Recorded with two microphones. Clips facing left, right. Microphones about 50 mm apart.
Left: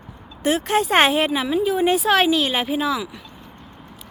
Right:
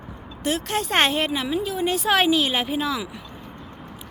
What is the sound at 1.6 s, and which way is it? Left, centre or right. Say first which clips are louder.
Speech: left 6 dB; left.